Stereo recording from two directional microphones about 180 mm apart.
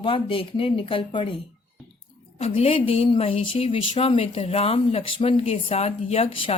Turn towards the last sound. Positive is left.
turn(degrees=30)  # may be behind; listen again after turning